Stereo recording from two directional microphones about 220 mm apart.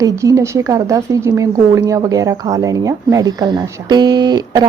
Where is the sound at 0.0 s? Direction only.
15° right (ahead or behind).